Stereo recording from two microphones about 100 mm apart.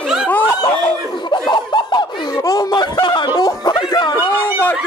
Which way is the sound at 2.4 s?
45° left (ahead or behind).